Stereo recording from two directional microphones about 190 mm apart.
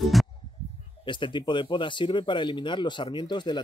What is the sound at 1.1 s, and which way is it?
Speech, 25° left (ahead or behind).